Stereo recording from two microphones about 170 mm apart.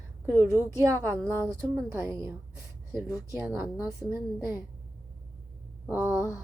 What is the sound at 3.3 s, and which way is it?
A woman's voice, 15° right (ahead or behind).